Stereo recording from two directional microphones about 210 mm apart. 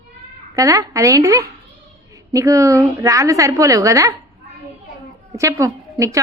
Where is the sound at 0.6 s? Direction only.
15° right (ahead or behind).